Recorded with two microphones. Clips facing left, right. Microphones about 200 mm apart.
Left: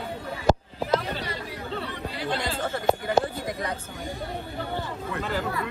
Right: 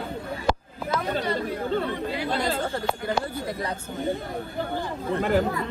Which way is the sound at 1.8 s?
45° right (ahead or behind).